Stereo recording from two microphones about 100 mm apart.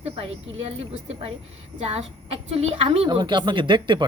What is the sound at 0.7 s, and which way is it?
A woman's voice, 85° right.